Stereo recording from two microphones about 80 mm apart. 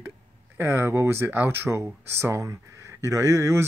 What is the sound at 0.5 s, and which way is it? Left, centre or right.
Speech, right.